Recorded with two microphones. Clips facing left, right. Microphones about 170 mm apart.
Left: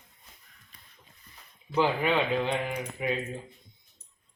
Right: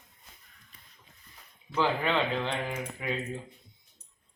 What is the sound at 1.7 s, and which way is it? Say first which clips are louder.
Speech: left 2 dB; 15° left (ahead or behind).